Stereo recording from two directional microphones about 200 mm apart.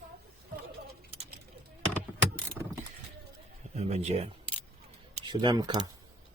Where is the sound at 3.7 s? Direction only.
30° right (ahead or behind).